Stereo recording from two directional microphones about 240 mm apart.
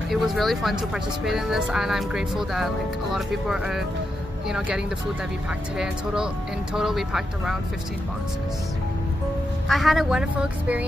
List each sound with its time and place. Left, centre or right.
0.1 s speech: centre
6.7 s speech: centre
9.7 s speech: centre